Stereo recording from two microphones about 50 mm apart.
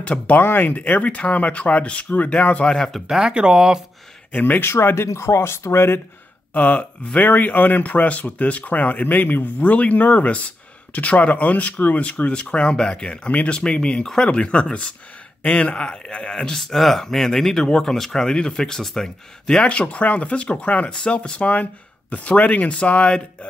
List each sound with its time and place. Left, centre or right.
0.0 s speech: left
0.4 s speech: left
3.1 s speech: centre
4.3 s speech: left
4.6 s speech: left
6.5 s speech: left
16.5 s speech: centre
19.4 s speech: centre